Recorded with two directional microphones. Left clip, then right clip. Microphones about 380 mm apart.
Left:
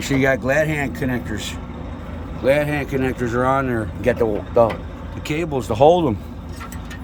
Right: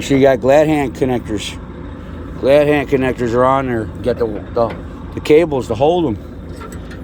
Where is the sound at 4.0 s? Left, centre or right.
Centre.